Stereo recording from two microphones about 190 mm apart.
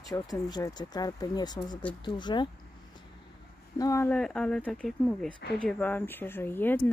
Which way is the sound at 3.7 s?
15° left (ahead or behind).